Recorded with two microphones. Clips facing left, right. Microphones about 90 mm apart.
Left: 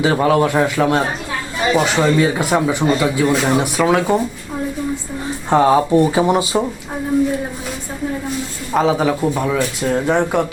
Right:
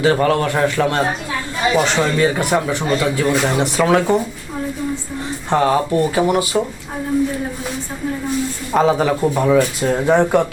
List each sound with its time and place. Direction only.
0.0 s speech: 10° left (ahead or behind)
5.5 s speech: 15° left (ahead or behind)
8.7 s speech: centre (ahead or behind)